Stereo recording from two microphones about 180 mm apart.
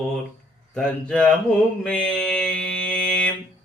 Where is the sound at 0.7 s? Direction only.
5° left (ahead or behind).